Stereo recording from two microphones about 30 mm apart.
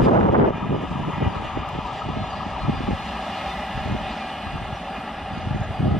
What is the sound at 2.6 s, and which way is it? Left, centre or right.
Vehicle, centre.